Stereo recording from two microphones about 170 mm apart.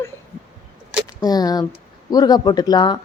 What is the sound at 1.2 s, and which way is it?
Speech, 20° left (ahead or behind).